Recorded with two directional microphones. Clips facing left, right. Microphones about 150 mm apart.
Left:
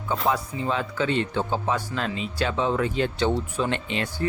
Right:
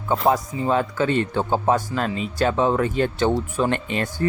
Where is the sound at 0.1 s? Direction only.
40° right (ahead or behind).